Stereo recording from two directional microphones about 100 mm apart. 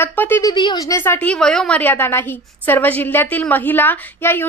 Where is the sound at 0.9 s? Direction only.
25° left (ahead or behind).